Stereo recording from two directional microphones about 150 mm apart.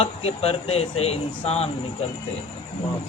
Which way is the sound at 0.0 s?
45° left (ahead or behind).